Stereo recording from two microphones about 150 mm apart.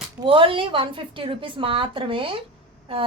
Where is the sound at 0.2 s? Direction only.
35° right (ahead or behind).